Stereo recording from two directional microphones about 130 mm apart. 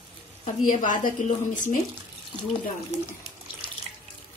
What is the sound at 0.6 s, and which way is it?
Speech, 85° left.